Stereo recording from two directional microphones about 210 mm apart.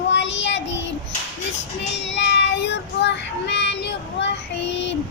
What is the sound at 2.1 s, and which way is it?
Child singing, 55° left (ahead or behind).